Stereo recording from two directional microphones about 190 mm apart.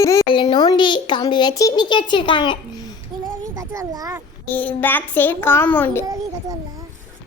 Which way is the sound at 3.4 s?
20° right (ahead or behind).